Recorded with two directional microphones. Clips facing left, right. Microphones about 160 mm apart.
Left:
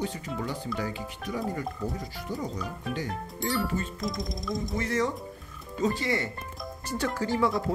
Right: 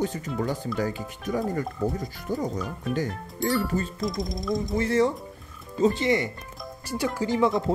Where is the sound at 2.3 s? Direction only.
45° right (ahead or behind).